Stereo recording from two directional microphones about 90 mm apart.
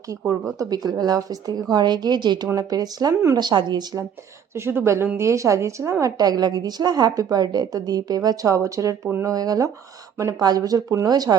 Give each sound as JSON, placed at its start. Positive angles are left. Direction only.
{"t": 0.6, "sound": "speech", "side_deg": -45}
{"t": 2.6, "sound": "speech", "side_deg": -45}
{"t": 4.5, "sound": "a woman's voice", "side_deg": -30}